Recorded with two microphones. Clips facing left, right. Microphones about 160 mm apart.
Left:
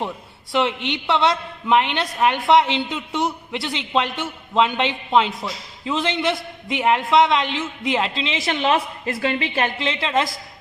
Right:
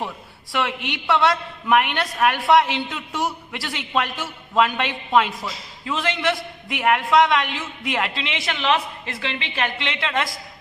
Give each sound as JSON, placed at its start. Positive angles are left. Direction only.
{"t": 0.5, "sound": "a man's voice", "side_deg": 25}